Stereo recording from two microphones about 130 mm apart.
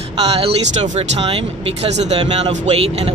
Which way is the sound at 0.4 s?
50° right (ahead or behind).